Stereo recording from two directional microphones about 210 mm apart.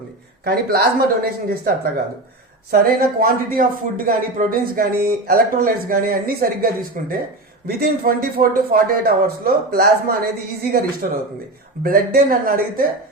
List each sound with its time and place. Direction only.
0.4 s a man's voice: 45° right (ahead or behind)